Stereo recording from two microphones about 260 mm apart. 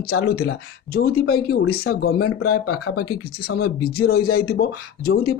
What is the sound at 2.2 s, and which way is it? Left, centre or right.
Speech, left.